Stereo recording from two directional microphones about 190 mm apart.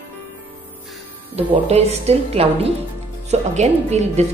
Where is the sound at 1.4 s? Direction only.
35° right (ahead or behind).